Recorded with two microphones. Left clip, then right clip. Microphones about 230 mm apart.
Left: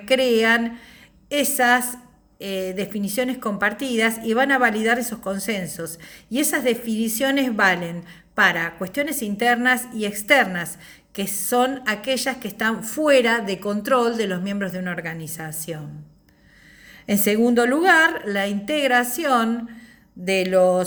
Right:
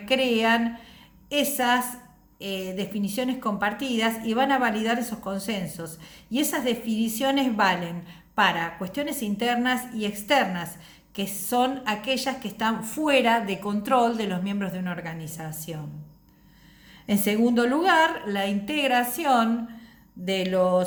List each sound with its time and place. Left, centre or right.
0.0 s a woman's voice: centre
17.1 s a woman's voice: centre